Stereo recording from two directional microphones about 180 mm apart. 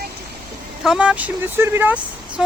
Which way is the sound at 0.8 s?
5° right (ahead or behind).